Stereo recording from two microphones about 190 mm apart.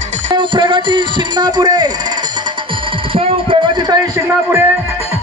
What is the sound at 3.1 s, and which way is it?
Music, 30° right (ahead or behind).